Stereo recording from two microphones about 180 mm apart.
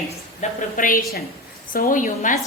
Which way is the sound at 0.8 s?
50° left (ahead or behind).